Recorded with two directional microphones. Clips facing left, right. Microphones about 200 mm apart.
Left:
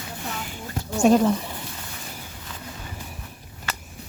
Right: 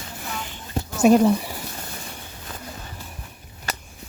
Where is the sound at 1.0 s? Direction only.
10° right (ahead or behind).